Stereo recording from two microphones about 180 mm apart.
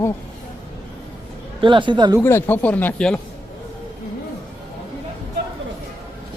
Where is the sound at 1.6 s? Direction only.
25° right (ahead or behind).